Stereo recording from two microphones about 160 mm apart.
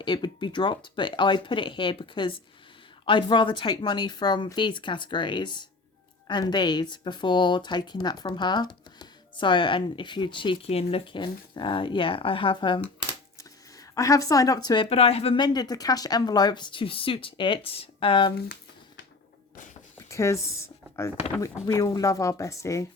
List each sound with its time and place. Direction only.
0.0 s speech: 30° left (ahead or behind)
20.0 s a sound: 20° left (ahead or behind)
21.4 s speech: 20° left (ahead or behind)